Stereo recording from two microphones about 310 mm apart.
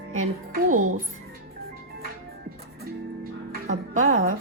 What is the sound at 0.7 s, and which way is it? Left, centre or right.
Speech, right.